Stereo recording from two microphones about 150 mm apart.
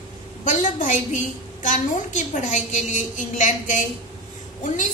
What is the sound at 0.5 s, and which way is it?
A woman's voice, 55° left (ahead or behind).